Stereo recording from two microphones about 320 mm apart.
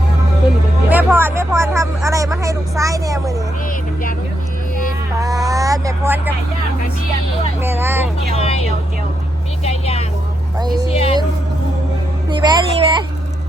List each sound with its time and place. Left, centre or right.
0.9 s vehicle: centre
5.1 s a sound: centre
7.6 s speech: centre
8.4 s a sound: centre
9.6 s vehicle: centre
10.8 s speech: centre
12.3 s speech: centre